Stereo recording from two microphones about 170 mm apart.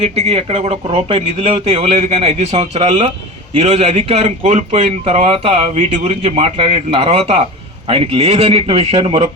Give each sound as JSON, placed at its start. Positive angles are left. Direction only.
{"t": 0.0, "sound": "a man's voice", "side_deg": -35}